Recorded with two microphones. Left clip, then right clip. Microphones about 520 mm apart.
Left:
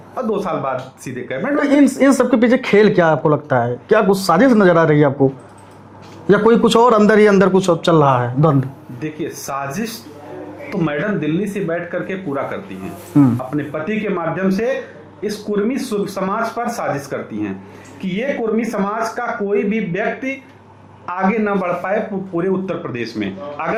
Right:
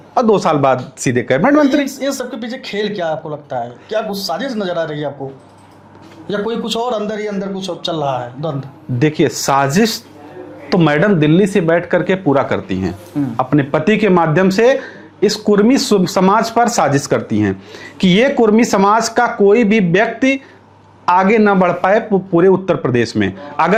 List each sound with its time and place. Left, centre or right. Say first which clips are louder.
0.1 s speech: right 8 dB; right
1.8 s speech: left 6 dB; left
6.2 s speech: left 7 dB; left
9.0 s speech: right 11 dB; right
13.2 s speech: left 8 dB; left
13.5 s speech: right 8 dB; right
18.0 s speech: right 9 dB; right